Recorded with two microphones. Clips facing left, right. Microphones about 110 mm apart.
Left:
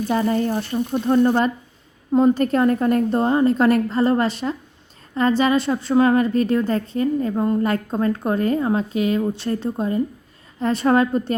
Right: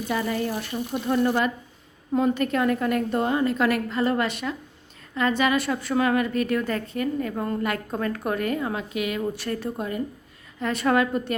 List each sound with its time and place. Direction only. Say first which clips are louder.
0.1 s a woman's voice: left 5 dB; 35° left (ahead or behind)